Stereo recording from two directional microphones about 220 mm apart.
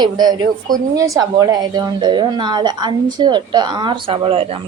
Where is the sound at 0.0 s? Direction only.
20° right (ahead or behind).